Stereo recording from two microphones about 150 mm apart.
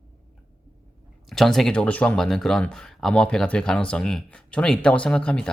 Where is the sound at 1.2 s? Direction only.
Centre (ahead or behind).